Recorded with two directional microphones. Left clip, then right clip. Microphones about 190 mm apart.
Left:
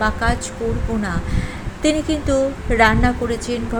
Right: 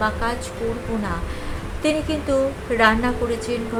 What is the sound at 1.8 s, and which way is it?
A woman's voice, 20° left (ahead or behind).